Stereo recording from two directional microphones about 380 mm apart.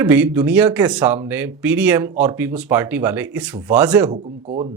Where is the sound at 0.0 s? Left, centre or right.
Centre.